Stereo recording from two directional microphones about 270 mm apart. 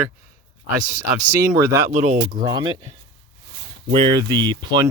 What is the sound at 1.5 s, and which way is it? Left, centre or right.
Speech, centre.